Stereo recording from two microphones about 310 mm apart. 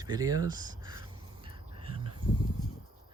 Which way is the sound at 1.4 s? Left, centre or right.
Centre.